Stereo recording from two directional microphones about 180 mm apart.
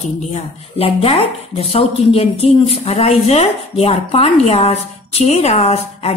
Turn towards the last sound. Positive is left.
turn(degrees=35)  # may be behind; listen again after turning